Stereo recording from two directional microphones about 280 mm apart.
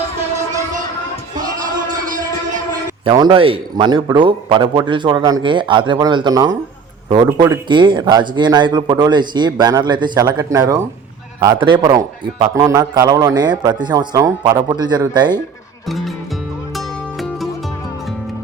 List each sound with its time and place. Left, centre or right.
1.5 s music: right
3.0 s a man's voice: centre
15.9 s speech: centre
16.7 s music: centre